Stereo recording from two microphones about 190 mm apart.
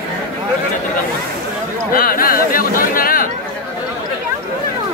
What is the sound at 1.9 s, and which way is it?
Chatter, 50° left (ahead or behind).